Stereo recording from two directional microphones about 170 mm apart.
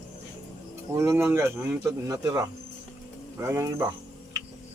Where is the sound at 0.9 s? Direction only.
15° right (ahead or behind).